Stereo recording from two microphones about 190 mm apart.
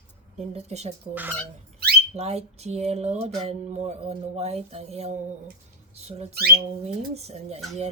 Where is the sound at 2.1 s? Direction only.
35° right (ahead or behind).